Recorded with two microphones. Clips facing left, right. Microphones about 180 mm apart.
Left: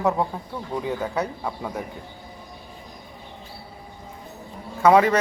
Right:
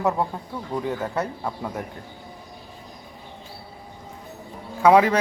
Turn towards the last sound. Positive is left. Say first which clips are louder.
# even
turn(degrees=-5)  # may be behind; listen again after turning